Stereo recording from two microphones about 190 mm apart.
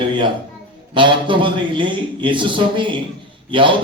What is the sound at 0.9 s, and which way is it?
Mantra, 25° right (ahead or behind).